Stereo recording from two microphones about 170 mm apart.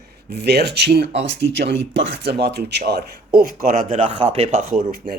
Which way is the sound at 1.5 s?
90° right.